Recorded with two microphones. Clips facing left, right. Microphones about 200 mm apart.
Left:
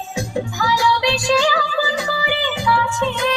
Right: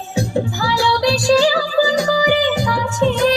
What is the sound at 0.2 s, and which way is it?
Music, 35° right (ahead or behind).